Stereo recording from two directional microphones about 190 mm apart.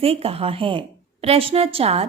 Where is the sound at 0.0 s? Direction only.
30° right (ahead or behind).